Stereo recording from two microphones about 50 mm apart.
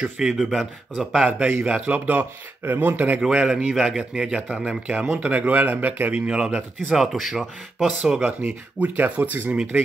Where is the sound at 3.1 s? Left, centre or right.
Right.